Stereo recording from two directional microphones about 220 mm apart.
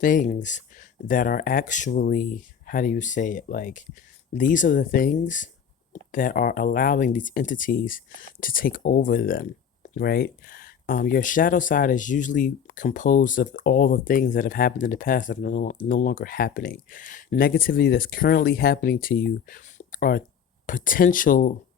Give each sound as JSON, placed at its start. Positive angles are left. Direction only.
{"t": 0.0, "sound": "speech", "side_deg": 35}